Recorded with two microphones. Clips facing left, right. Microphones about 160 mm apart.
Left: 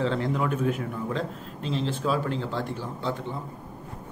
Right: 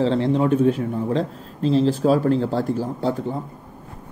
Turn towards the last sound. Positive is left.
turn(degrees=-40)  # may be behind; listen again after turning